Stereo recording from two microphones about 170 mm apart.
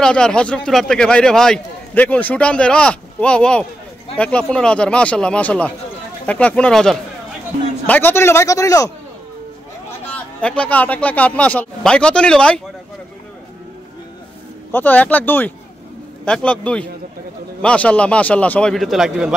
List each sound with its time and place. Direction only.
0.0 s a man's voice: 5° left (ahead or behind)
9.8 s a man's voice: 5° left (ahead or behind)
14.7 s a man's voice: 10° left (ahead or behind)